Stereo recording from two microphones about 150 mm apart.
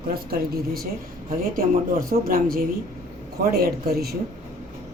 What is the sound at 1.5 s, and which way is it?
Speech, 75° right (ahead or behind).